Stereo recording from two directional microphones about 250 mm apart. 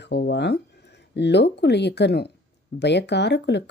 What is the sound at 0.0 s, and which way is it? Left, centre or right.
Speech, left.